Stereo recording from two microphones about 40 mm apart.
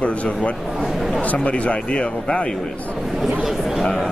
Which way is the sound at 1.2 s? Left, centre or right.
Left.